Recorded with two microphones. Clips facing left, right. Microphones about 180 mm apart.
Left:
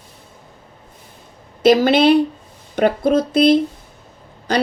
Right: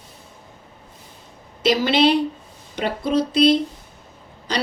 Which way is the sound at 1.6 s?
50° left (ahead or behind).